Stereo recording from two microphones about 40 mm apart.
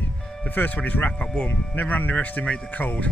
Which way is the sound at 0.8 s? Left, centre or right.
Left.